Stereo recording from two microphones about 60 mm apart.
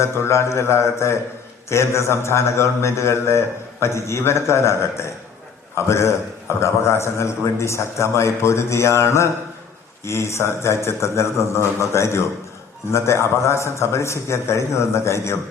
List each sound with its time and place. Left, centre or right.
0.0 s a man's voice: left